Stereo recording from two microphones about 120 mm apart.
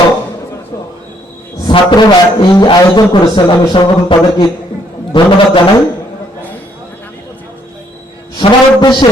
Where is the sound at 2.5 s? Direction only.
35° left (ahead or behind).